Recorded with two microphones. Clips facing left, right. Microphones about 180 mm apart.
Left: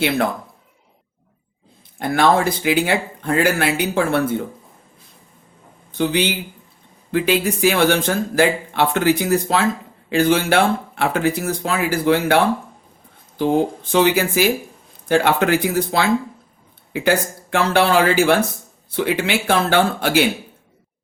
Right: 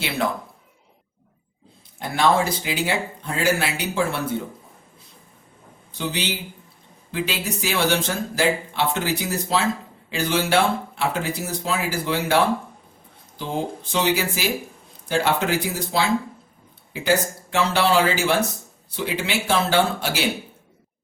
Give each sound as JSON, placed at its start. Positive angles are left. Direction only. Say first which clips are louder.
{"t": 2.0, "sound": "speech", "louder": "left 4 dB", "side_deg": 55}
{"t": 6.0, "sound": "speech", "louder": "left 8 dB", "side_deg": 55}
{"t": 13.4, "sound": "speech", "louder": "left 9 dB", "side_deg": 55}